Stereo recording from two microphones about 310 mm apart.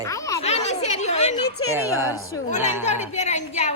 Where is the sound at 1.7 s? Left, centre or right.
Centre.